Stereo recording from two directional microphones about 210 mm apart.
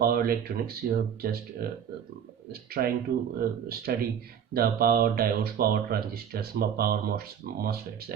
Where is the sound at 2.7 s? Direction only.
45° right (ahead or behind).